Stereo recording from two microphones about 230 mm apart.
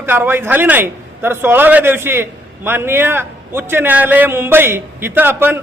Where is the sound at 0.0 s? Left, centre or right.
Centre.